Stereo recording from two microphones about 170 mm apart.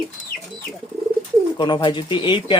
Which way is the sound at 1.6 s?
30° left (ahead or behind).